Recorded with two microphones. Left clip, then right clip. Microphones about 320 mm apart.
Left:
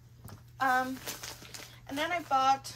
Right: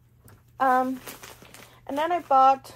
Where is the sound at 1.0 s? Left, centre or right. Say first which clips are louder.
Even; right.